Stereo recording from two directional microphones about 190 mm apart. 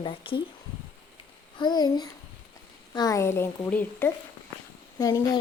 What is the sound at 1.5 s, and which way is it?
Speech, 20° left (ahead or behind).